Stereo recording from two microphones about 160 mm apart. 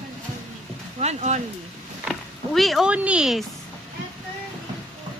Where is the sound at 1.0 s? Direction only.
45° right (ahead or behind).